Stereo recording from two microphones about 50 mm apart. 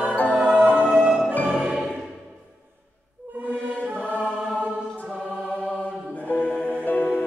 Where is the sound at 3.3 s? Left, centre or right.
Right.